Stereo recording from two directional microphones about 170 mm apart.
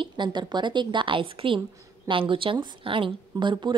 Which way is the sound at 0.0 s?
25° right (ahead or behind).